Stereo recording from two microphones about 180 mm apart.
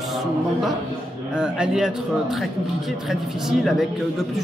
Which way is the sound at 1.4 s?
5° right (ahead or behind).